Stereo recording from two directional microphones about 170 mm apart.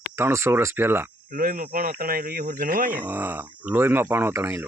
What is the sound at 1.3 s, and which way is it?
Speech, 55° right (ahead or behind).